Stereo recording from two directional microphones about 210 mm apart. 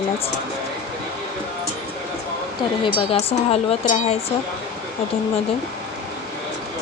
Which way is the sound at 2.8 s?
25° left (ahead or behind).